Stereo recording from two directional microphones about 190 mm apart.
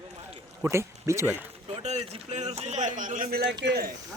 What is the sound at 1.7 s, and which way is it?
A man's voice, 35° right (ahead or behind).